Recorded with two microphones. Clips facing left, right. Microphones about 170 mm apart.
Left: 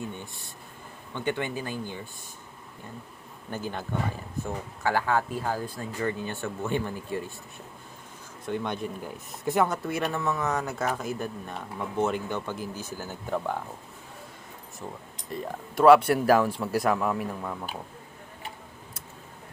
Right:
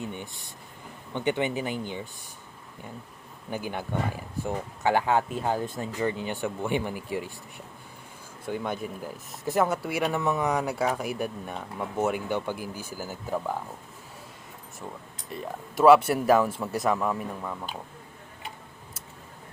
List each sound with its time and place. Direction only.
0.0 s a sound: 15° right (ahead or behind)
1.1 s speech: 20° right (ahead or behind)
3.5 s speech: 15° right (ahead or behind)
8.4 s speech: 5° right (ahead or behind)
15.7 s speech: centre (ahead or behind)